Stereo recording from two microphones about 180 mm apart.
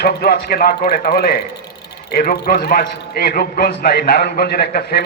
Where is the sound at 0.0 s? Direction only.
60° left (ahead or behind).